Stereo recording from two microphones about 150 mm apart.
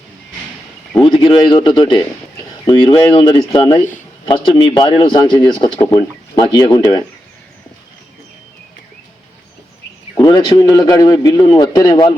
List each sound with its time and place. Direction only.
1.0 s a man's voice: 35° left (ahead or behind)
10.2 s a man's voice: 30° left (ahead or behind)
11.4 s a man's voice: 35° left (ahead or behind)
11.7 s a man's voice: 25° left (ahead or behind)